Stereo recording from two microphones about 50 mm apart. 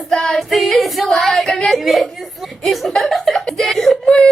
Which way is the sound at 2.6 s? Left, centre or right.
Centre.